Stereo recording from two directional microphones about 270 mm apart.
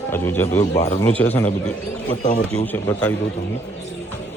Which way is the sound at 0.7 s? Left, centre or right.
Left.